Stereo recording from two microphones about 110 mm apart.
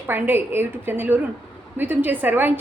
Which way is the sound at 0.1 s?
20° right (ahead or behind).